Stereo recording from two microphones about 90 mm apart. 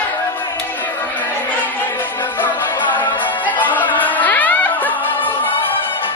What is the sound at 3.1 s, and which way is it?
Music, 20° left (ahead or behind).